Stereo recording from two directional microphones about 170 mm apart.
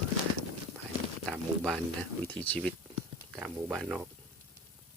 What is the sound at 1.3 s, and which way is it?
Speech, 5° left (ahead or behind).